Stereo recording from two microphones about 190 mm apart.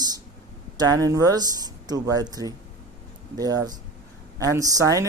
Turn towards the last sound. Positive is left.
turn(degrees=-20)  # may be behind; listen again after turning